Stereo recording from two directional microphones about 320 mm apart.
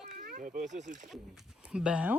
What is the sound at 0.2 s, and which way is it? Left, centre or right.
Speech, right.